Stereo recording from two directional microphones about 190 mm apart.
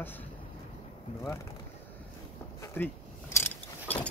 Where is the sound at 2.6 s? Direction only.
10° left (ahead or behind).